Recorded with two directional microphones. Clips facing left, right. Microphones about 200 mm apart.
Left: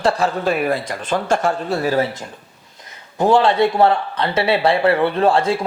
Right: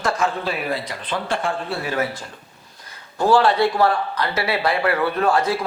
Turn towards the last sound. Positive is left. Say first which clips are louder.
# left 3 dB
turn(degrees=25)  # may be behind; listen again after turning